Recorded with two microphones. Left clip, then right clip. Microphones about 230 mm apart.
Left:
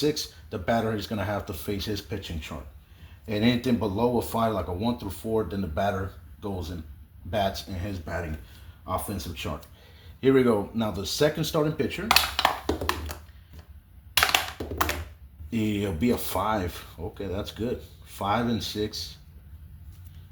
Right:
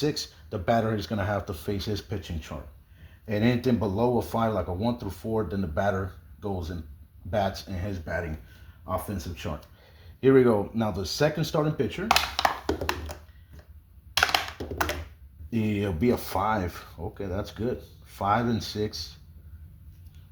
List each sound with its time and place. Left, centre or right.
0.0 s speech: right
12.0 s a sound: centre
14.1 s computer keyboard: centre
15.5 s speech: right